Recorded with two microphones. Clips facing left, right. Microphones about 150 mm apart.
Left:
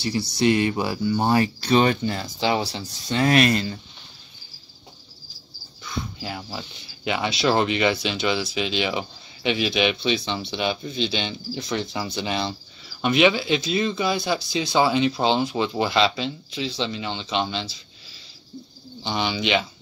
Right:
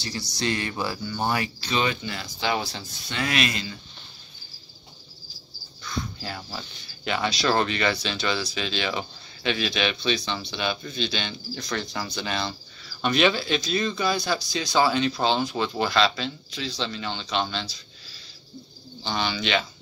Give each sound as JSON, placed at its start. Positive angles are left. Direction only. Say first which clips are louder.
{"t": 0.4, "sound": "speech", "louder": "left 7 dB", "side_deg": 20}
{"t": 1.6, "sound": "speech", "louder": "left 7 dB", "side_deg": 45}
{"t": 6.1, "sound": "speech", "louder": "left 3 dB", "side_deg": 15}
{"t": 19.0, "sound": "speech", "louder": "left 3 dB", "side_deg": 15}